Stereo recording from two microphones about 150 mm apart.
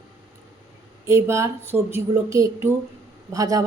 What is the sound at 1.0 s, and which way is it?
Speech, 20° right (ahead or behind).